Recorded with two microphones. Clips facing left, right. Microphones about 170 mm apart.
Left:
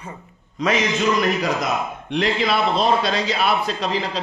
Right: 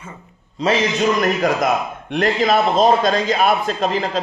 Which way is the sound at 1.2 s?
50° right (ahead or behind).